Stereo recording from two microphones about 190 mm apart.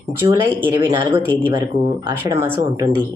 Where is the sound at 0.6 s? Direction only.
10° right (ahead or behind).